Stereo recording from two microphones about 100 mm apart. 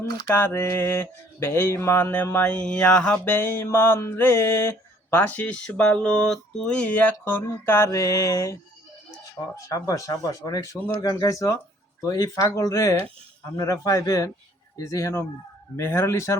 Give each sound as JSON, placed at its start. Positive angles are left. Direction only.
{"t": 0.3, "sound": "mantra", "side_deg": 25}
{"t": 3.2, "sound": "mantra", "side_deg": 25}
{"t": 9.6, "sound": "speech", "side_deg": 35}
{"t": 15.7, "sound": "mantra", "side_deg": 25}